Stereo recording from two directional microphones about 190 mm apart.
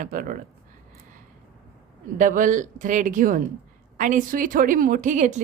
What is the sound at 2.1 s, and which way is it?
A woman's voice, 45° right (ahead or behind).